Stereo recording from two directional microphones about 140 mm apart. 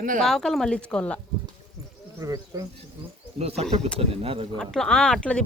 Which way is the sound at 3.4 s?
45° right (ahead or behind).